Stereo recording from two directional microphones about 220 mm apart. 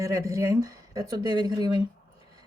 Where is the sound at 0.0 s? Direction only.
15° right (ahead or behind).